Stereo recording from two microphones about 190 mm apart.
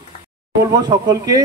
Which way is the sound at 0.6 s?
20° right (ahead or behind).